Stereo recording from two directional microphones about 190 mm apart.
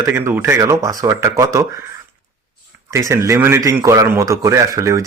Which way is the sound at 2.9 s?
15° right (ahead or behind).